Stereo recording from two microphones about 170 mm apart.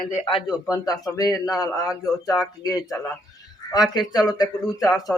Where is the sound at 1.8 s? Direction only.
Centre (ahead or behind).